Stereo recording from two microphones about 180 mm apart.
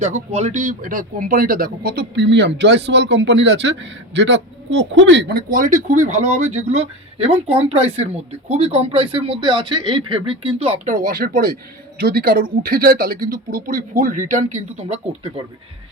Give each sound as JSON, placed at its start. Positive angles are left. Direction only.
{"t": 0.0, "sound": "speech", "side_deg": -35}
{"t": 10.8, "sound": "speech", "side_deg": -45}